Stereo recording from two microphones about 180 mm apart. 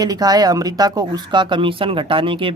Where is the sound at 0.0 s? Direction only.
20° right (ahead or behind).